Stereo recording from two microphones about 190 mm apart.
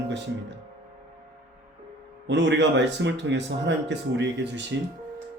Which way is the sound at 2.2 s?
70° right (ahead or behind).